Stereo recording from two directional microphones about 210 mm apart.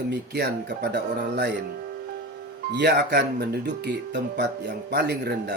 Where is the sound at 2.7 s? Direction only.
55° right (ahead or behind).